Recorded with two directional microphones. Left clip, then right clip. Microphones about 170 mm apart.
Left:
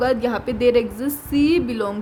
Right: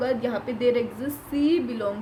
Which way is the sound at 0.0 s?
65° left (ahead or behind).